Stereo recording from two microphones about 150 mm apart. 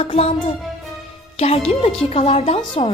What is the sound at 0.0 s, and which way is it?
A woman's voice, 40° left (ahead or behind).